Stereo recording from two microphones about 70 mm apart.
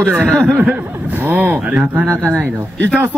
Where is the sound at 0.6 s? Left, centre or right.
Right.